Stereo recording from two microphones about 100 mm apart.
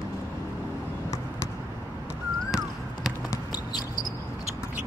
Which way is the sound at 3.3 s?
40° left (ahead or behind).